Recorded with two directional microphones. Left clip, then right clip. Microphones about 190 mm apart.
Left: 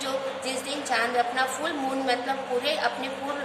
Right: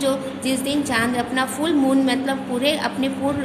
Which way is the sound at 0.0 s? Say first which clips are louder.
Right 6 dB; 40° right (ahead or behind).